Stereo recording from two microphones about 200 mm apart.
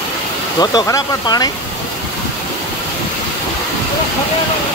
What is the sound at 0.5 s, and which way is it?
Speech, 20° left (ahead or behind).